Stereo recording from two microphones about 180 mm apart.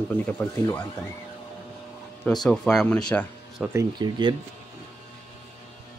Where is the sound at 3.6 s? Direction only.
15° right (ahead or behind).